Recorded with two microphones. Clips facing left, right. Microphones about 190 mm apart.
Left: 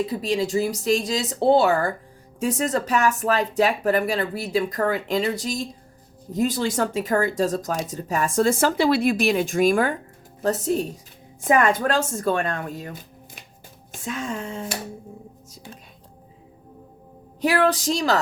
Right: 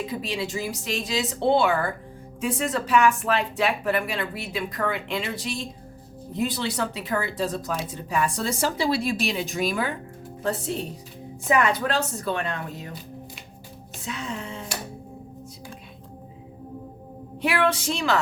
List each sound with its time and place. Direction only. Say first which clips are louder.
0.0 s speech: left 6 dB; 40° left (ahead or behind)
17.4 s speech: left 3 dB; 40° left (ahead or behind)